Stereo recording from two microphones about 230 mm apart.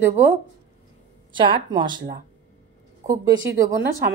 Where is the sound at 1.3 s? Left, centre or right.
Right.